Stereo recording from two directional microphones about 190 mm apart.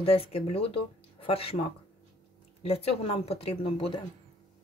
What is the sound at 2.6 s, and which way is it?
Speech, 30° left (ahead or behind).